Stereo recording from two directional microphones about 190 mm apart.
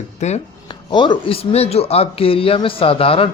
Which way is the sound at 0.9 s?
25° left (ahead or behind).